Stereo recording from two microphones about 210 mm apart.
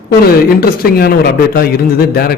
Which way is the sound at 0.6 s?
45° left (ahead or behind).